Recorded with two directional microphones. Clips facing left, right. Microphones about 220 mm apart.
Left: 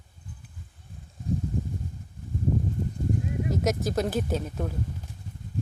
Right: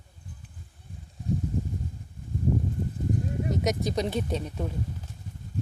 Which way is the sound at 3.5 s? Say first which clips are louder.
Left 1 dB; centre (ahead or behind).